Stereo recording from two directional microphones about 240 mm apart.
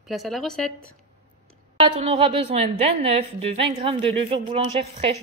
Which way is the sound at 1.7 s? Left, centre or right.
Right.